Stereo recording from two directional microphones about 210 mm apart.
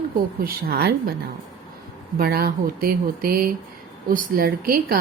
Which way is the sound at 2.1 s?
45° right (ahead or behind).